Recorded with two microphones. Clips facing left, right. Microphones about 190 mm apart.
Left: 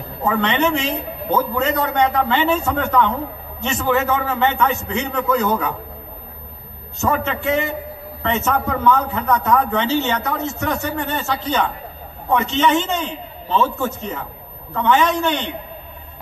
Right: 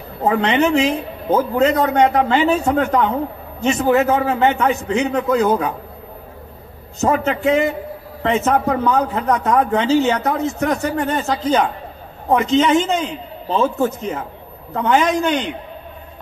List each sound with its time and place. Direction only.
0.2 s a man's voice: 35° right (ahead or behind)
7.0 s a man's voice: 35° right (ahead or behind)